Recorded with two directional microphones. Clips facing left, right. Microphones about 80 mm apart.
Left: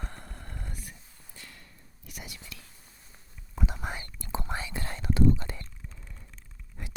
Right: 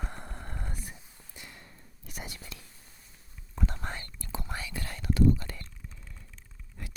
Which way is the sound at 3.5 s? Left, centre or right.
Centre.